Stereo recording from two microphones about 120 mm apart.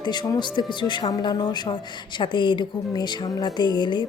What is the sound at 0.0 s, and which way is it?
A woman's voice, 35° left (ahead or behind).